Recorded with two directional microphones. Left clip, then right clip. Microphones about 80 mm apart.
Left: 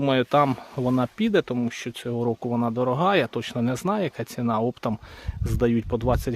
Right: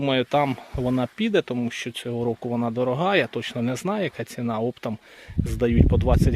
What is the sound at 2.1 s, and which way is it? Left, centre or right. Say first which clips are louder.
Speech: left 1 dB; left.